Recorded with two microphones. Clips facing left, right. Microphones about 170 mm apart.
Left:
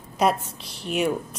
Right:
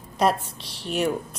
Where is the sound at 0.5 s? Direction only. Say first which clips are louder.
Left 1 dB; 35° right (ahead or behind).